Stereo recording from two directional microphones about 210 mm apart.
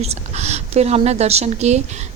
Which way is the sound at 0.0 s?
30° right (ahead or behind).